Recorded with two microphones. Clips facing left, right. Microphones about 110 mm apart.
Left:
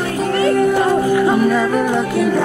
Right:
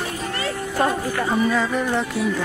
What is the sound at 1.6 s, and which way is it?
Music, 60° left (ahead or behind).